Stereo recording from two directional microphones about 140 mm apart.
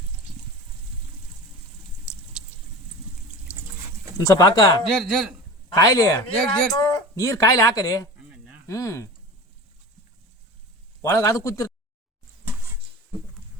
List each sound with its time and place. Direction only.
4.2 s a man's voice: 25° left (ahead or behind)
4.9 s speech: centre (ahead or behind)
5.6 s a man's voice: 25° left (ahead or behind)
6.4 s speech: 5° left (ahead or behind)
6.7 s speech: 25° left (ahead or behind)
8.3 s sizzle: 10° right (ahead or behind)
8.6 s a man's voice: 20° left (ahead or behind)
11.0 s a man's voice: 20° left (ahead or behind)